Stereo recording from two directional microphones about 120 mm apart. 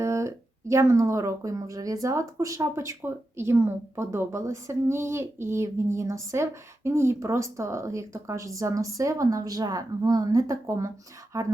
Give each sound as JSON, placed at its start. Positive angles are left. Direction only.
{"t": 0.0, "sound": "speech", "side_deg": -25}